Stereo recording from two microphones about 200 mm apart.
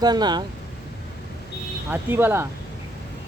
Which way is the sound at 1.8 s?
10° right (ahead or behind).